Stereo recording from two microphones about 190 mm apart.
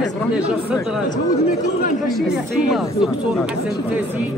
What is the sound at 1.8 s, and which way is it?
Speech, 45° left (ahead or behind).